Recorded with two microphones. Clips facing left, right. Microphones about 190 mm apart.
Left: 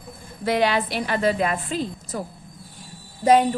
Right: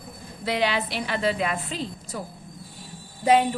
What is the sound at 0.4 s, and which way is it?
A woman's voice, 50° left (ahead or behind).